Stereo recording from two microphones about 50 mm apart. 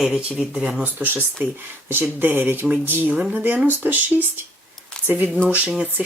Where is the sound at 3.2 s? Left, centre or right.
Right.